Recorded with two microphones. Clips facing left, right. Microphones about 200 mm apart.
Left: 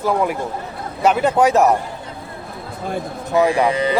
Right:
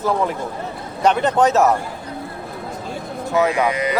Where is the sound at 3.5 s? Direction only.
30° left (ahead or behind).